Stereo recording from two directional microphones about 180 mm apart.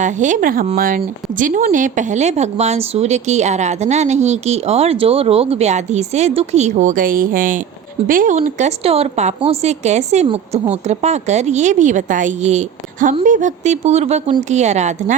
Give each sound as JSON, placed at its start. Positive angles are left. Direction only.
{"t": 0.0, "sound": "a woman's voice", "side_deg": -45}